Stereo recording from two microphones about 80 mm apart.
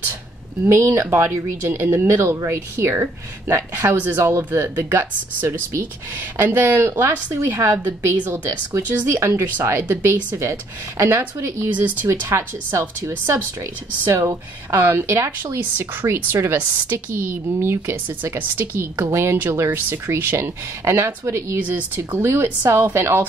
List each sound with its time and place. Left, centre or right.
0.7 s speech: right
21.5 s speech: right